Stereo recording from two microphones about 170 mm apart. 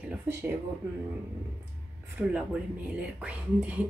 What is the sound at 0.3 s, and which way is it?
Speech, 15° right (ahead or behind).